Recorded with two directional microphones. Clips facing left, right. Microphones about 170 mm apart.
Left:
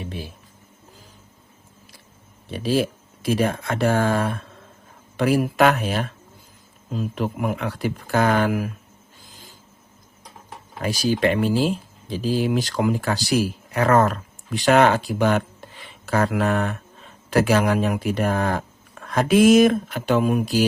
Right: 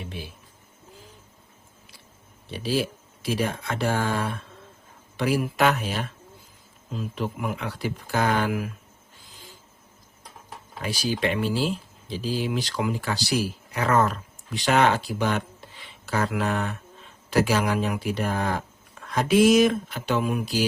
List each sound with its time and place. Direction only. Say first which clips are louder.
3.2 s speech: left 5 dB; 50° left (ahead or behind)
7.2 s speech: left 4 dB; 50° left (ahead or behind)
10.8 s speech: left 6 dB; 50° left (ahead or behind)